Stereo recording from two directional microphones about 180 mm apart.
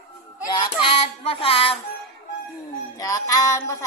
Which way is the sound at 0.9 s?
30° left (ahead or behind).